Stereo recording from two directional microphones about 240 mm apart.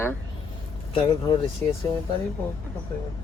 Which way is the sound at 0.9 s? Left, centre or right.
Left.